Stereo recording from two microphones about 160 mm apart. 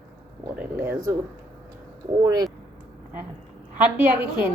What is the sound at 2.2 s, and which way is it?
Speech, 20° right (ahead or behind).